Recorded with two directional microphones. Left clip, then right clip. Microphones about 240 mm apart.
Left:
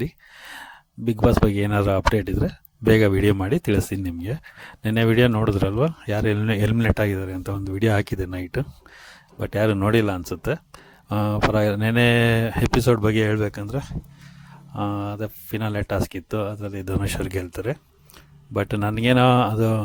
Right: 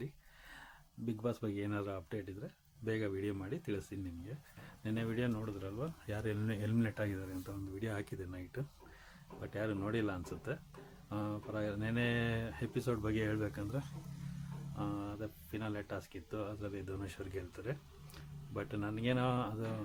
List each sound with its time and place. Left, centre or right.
0.0 s speech: left